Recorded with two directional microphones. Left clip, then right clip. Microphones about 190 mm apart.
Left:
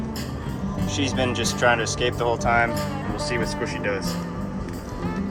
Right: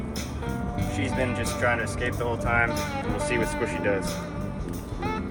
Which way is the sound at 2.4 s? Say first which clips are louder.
Left 3 dB; 20° left (ahead or behind).